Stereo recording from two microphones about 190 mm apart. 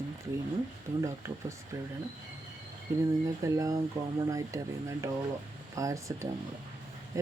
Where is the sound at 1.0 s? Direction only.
15° right (ahead or behind).